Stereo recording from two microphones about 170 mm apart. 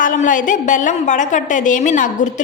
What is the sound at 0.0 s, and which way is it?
A woman's voice, 50° left (ahead or behind).